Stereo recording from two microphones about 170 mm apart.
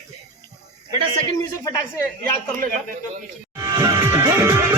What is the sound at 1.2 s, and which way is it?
Speech, 20° left (ahead or behind).